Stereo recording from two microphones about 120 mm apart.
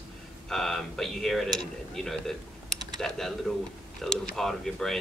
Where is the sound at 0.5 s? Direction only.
5° left (ahead or behind).